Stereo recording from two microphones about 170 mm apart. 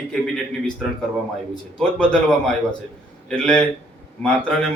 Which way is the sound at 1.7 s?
5° left (ahead or behind).